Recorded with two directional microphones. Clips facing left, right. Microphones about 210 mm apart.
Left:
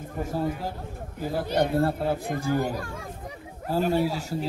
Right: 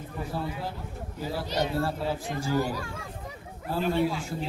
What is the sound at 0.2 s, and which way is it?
A man's voice, 45° left (ahead or behind).